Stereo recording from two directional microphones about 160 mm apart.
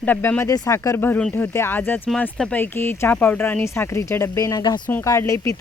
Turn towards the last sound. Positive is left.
turn(degrees=20)  # may be behind; listen again after turning